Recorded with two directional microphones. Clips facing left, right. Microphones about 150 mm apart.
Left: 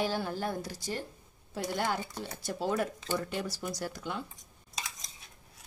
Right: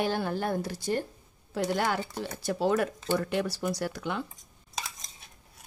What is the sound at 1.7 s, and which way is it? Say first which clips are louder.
Speech: right 4 dB; 70° right (ahead or behind).